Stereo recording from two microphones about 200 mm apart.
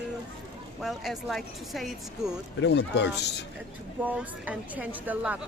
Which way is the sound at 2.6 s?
60° left (ahead or behind).